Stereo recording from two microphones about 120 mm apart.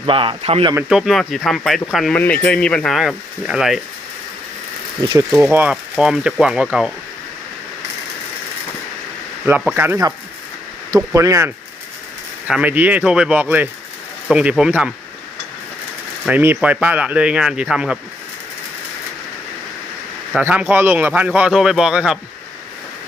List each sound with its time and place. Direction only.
0.0 s speech: 45° right (ahead or behind)
0.9 s speech: 5° right (ahead or behind)
2.1 s speech: 10° left (ahead or behind); by 3.8 s 5° right (ahead or behind)
5.4 s speech: 15° right (ahead or behind)
5.7 s speech: 5° right (ahead or behind)
9.7 s speech: 20° right (ahead or behind)
12.5 s speech: 10° right (ahead or behind)
16.2 s speech: 15° right (ahead or behind)
20.4 s speech: 15° right (ahead or behind)